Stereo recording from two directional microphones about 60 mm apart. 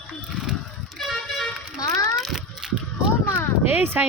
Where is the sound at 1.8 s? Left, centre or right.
Left.